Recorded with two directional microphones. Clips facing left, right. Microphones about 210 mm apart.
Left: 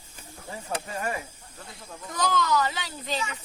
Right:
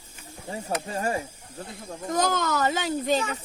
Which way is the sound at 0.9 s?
30° right (ahead or behind).